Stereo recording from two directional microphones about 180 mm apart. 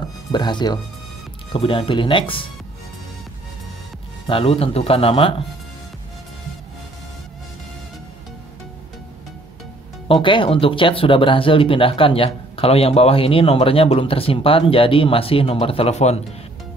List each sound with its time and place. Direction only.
0.3 s speech: 25° left (ahead or behind)
4.3 s speech: 30° left (ahead or behind)
10.2 s speech: 30° left (ahead or behind)